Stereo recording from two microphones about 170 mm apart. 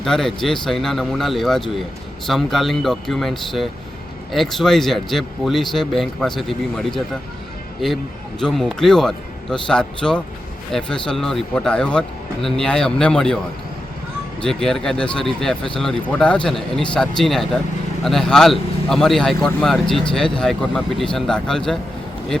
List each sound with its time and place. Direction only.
0.0 s speech: centre (ahead or behind)
8.4 s speech: 5° left (ahead or behind)
14.4 s speech: 5° left (ahead or behind)